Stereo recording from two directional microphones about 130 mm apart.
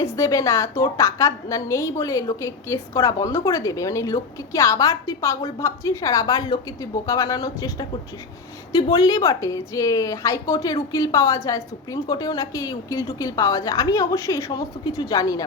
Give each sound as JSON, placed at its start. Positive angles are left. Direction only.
{"t": 0.0, "sound": "a woman's voice", "side_deg": 25}